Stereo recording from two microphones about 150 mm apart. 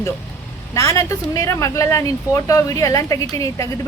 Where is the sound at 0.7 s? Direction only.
20° left (ahead or behind).